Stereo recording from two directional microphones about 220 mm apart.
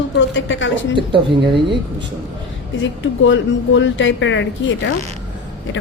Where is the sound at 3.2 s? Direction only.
55° left (ahead or behind).